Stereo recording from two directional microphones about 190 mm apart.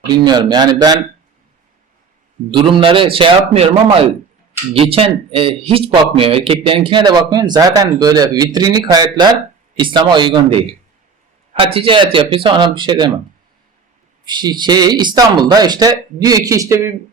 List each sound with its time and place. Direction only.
0.1 s speech: 20° right (ahead or behind)
2.5 s speech: 25° right (ahead or behind)
14.3 s speech: 20° right (ahead or behind)